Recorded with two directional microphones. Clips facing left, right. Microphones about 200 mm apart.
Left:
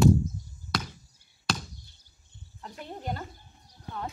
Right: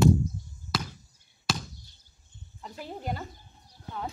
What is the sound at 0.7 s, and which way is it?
Chop, centre (ahead or behind).